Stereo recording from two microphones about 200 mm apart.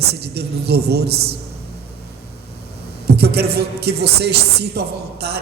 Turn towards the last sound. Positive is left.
turn(degrees=-55)  # may be behind; listen again after turning